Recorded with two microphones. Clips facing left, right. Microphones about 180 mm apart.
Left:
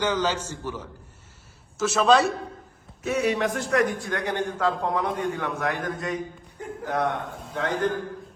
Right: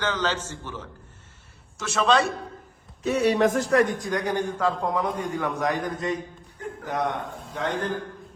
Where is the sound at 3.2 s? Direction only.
40° right (ahead or behind).